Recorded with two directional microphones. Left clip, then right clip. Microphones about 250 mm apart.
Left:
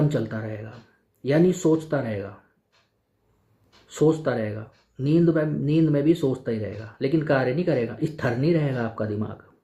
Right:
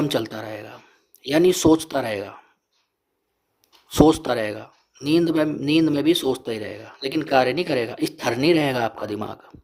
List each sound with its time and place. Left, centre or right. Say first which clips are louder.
0.0 s a sound: right 3 dB; right
1.2 s speech: right 3 dB; right
3.8 s speech: right 5 dB; right